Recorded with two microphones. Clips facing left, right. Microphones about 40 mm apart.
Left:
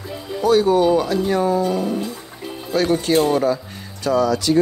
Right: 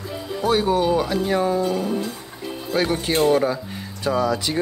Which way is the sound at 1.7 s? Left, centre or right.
Centre.